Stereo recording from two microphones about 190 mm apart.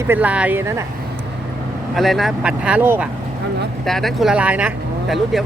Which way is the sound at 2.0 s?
Centre (ahead or behind).